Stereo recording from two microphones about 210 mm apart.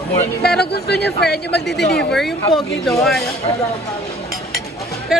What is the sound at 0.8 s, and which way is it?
Speech, 50° left (ahead or behind).